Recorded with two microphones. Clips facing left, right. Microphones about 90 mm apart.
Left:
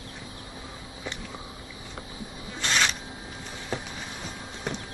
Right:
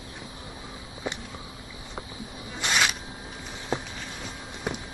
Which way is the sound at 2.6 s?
15° right (ahead or behind).